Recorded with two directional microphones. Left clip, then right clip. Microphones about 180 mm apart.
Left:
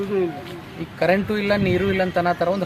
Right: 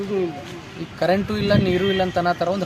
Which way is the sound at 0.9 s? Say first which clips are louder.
Left 1 dB; 15° left (ahead or behind).